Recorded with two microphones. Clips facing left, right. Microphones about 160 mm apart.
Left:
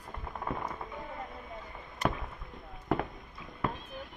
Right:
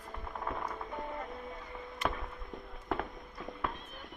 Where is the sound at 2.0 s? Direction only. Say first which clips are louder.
Left 3 dB; 40° left (ahead or behind).